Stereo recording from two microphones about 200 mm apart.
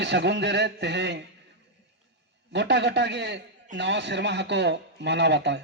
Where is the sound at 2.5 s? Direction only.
60° right (ahead or behind).